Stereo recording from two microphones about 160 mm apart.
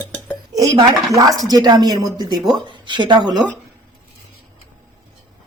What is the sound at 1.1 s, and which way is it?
Speech, 20° right (ahead or behind).